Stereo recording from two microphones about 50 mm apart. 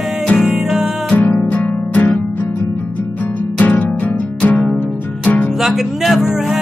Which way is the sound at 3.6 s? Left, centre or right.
Left.